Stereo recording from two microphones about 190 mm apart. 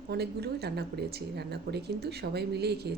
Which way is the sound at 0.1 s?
60° right (ahead or behind).